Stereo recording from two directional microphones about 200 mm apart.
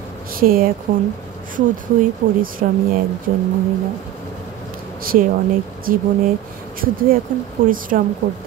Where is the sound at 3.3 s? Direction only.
40° right (ahead or behind).